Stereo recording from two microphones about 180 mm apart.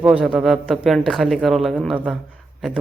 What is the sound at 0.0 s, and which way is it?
Speech, 5° right (ahead or behind).